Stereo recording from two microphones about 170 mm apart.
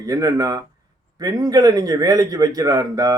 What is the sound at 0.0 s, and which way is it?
Speech, 20° right (ahead or behind).